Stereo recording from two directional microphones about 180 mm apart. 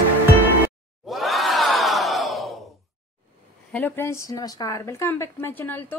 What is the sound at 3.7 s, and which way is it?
Speech, 10° left (ahead or behind).